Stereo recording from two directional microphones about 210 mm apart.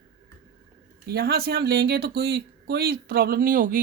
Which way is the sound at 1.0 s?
50° right (ahead or behind).